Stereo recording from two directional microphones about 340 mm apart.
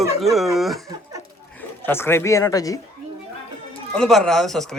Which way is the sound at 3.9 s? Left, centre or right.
Centre.